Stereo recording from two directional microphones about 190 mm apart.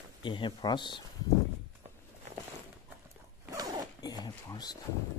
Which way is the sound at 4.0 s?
20° left (ahead or behind).